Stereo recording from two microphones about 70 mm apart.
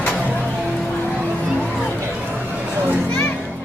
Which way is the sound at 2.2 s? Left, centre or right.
Centre.